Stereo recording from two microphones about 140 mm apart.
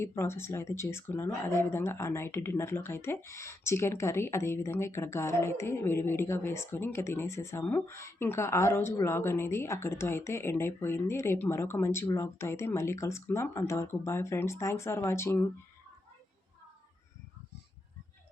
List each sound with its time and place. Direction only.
0.0 s speech: 20° left (ahead or behind)